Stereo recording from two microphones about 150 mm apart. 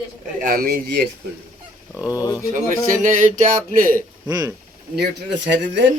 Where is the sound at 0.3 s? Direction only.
75° right (ahead or behind).